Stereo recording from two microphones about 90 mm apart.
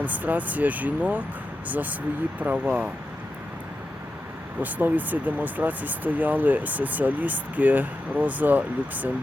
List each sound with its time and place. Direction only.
0.0 s speech: 15° right (ahead or behind)
4.6 s speech: 20° right (ahead or behind)